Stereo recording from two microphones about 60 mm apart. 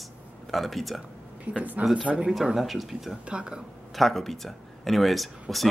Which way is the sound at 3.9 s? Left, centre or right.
Centre.